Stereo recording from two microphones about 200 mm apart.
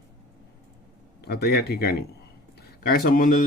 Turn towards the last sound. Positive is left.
turn(degrees=45)  # may be behind; listen again after turning